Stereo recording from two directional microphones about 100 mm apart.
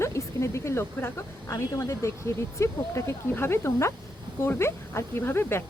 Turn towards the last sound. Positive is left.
turn(degrees=25)  # may be behind; listen again after turning